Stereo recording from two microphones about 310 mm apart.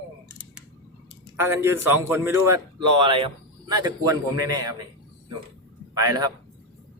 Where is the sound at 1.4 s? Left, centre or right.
Centre.